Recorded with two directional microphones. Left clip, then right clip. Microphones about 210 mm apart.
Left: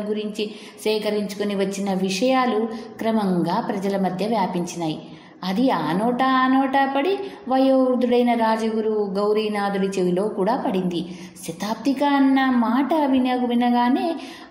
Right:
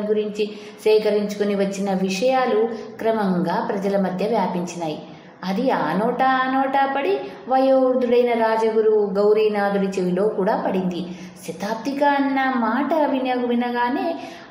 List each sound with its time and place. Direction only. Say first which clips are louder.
0.1 s a woman's voice: right 6 dB; 35° left (ahead or behind)